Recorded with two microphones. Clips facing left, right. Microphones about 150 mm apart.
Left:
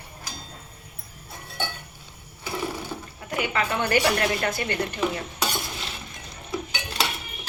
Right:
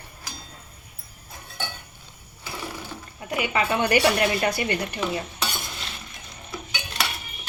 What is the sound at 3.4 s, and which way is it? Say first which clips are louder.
A woman's voice: right 2 dB; 15° right (ahead or behind).